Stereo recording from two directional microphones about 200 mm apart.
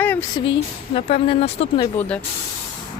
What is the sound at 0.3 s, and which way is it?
Speech, 25° left (ahead or behind).